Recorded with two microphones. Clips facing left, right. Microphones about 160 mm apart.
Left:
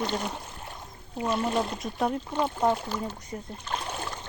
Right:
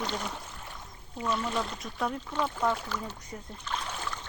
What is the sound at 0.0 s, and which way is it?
Speech, 20° left (ahead or behind).